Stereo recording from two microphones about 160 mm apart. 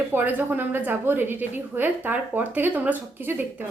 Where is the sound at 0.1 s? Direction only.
10° right (ahead or behind).